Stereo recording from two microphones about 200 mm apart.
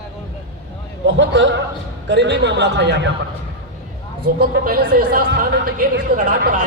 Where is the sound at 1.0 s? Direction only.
65° right (ahead or behind).